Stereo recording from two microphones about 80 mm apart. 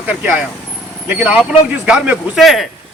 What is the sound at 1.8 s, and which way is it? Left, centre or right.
Speech, centre.